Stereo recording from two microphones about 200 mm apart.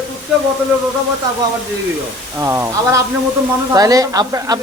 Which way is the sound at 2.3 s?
15° right (ahead or behind).